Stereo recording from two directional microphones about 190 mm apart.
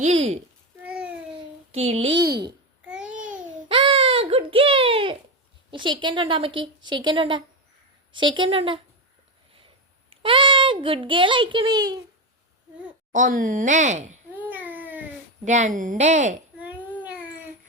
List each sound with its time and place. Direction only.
0.0 s speech: 35° right (ahead or behind)
1.7 s speech: 30° right (ahead or behind)
2.8 s babbling: 5° right (ahead or behind)
3.7 s baby cry: 25° right (ahead or behind)
5.7 s a woman's voice: 25° right (ahead or behind)
10.1 s a child's voice: 25° right (ahead or behind)
13.1 s speech: 45° right (ahead or behind)
14.3 s baby cry: 10° right (ahead or behind)
15.4 s speech: 40° right (ahead or behind)
16.6 s a sound: 10° right (ahead or behind)